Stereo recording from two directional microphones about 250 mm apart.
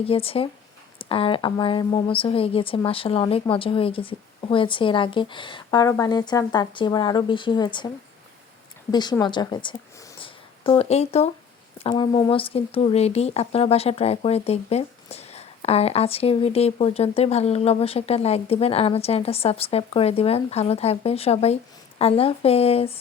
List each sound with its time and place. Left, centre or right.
0.0 s speech: left
8.9 s a woman's voice: centre
10.2 s a sound: left
11.8 s speech: centre